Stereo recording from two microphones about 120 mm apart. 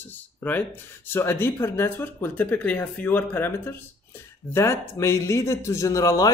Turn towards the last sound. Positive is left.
turn(degrees=25)  # may be behind; listen again after turning